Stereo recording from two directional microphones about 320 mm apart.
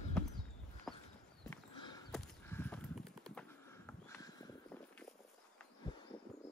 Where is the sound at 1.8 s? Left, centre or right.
Centre.